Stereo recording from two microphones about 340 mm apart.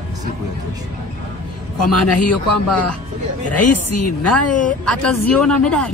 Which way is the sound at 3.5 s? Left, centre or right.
Left.